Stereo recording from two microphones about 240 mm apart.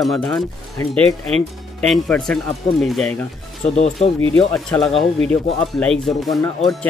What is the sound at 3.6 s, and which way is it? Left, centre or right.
Speech, left.